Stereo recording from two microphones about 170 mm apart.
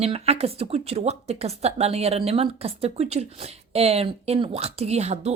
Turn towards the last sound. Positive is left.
turn(degrees=-40)  # may be behind; listen again after turning